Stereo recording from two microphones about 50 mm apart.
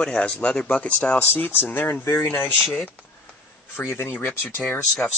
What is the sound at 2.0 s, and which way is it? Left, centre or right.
Speech, left.